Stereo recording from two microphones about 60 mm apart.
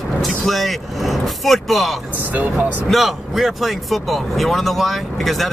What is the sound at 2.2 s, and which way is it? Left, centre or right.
Speech, right.